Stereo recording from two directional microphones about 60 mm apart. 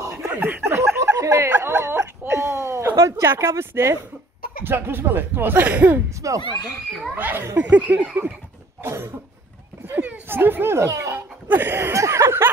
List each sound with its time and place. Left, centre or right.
0.4 s snicker: right
1.6 s a sound: right
3.0 s speech: right
4.6 s speech: right
6.0 s speech: right
7.2 s speech: right
8.8 s cough: right
9.9 s a sound: right
10.2 s speech: right
10.9 s speech: right
11.4 s speech: right
11.9 s a sound: right